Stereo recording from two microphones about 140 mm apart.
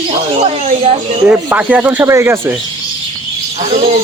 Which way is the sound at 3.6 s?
60° right (ahead or behind).